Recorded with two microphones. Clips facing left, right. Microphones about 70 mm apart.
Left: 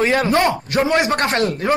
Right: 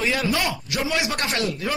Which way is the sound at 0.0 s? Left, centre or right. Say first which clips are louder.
Left 7 dB; left.